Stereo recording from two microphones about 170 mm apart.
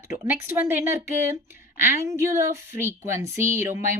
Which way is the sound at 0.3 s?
15° right (ahead or behind).